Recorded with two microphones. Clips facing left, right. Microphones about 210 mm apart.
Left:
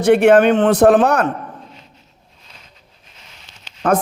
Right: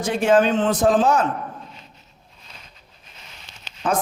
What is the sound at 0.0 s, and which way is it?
A man's voice, 65° left (ahead or behind).